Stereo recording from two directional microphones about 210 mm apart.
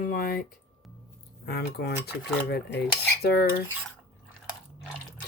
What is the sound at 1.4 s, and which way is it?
Speech, 50° left (ahead or behind).